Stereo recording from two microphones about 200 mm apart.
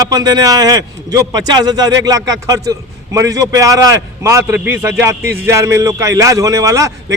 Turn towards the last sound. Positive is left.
turn(degrees=-15)  # may be behind; listen again after turning